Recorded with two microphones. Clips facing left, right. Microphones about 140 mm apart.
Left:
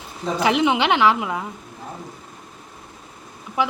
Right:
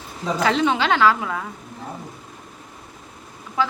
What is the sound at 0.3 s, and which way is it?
A woman's voice, 15° left (ahead or behind).